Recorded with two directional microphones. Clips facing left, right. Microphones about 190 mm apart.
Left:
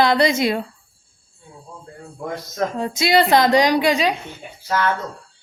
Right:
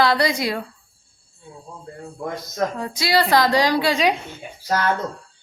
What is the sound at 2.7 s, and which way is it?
Speech, 25° left (ahead or behind).